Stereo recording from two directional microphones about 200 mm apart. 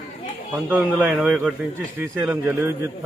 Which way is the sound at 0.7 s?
5° right (ahead or behind).